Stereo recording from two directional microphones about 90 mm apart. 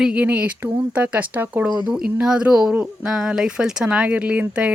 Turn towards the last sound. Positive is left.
turn(degrees=-15)  # may be behind; listen again after turning